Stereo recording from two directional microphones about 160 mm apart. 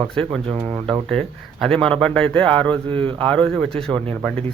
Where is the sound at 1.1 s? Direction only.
5° left (ahead or behind).